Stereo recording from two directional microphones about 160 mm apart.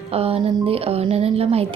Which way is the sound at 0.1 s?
40° right (ahead or behind).